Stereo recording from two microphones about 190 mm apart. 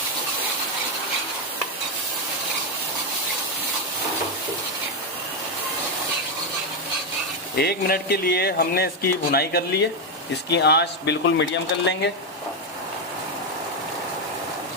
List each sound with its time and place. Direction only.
7.5 s speech: 55° left (ahead or behind)